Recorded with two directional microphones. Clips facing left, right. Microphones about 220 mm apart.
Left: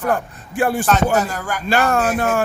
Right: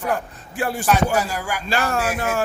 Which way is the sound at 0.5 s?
55° left (ahead or behind).